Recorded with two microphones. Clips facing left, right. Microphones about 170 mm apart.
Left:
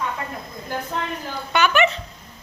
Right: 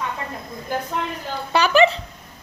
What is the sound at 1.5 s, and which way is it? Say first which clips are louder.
Speech: right 3 dB; 35° right (ahead or behind).